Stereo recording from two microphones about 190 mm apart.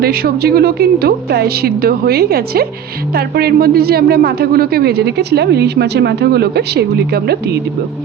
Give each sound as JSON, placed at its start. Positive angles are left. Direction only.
{"t": 0.0, "sound": "a woman's voice", "side_deg": -50}